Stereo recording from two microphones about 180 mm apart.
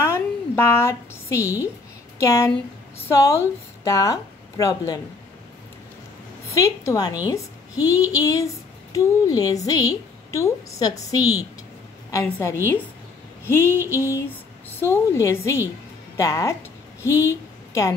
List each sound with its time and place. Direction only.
0.0 s a sound: 15° left (ahead or behind)
2.1 s a woman's voice: 15° left (ahead or behind)
6.6 s a woman's voice: 20° left (ahead or behind)